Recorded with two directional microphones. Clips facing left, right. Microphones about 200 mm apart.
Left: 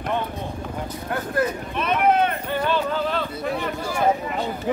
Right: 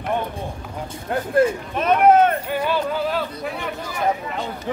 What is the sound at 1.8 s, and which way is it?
Speech, 45° right (ahead or behind).